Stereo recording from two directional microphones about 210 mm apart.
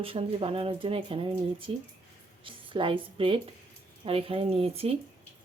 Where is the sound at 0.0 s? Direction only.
25° right (ahead or behind).